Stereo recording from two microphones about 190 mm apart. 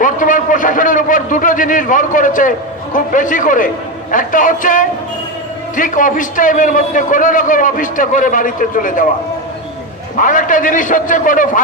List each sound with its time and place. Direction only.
0.0 s a man's voice: 45° left (ahead or behind)
10.1 s a man's voice: 45° left (ahead or behind)